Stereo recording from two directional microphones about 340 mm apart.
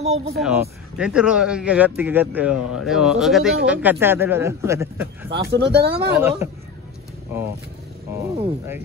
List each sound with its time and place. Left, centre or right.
0.0 s speech: centre
0.4 s speech: centre
5.4 s speech: right
6.1 s speech: centre
8.4 s speech: centre